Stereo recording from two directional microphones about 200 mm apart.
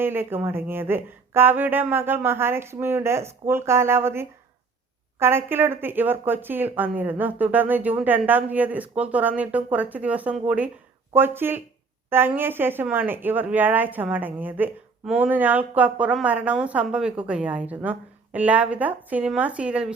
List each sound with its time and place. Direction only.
0.0 s speech: 10° right (ahead or behind)